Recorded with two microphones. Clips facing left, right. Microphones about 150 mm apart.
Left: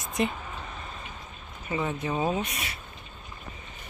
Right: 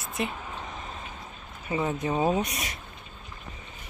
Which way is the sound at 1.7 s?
25° right (ahead or behind).